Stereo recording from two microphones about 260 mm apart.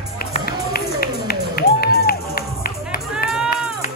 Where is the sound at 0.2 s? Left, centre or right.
Left.